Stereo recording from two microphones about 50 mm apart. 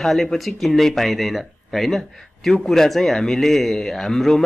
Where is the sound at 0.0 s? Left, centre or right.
Centre.